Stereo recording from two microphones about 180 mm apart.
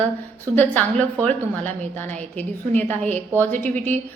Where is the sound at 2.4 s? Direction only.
10° left (ahead or behind).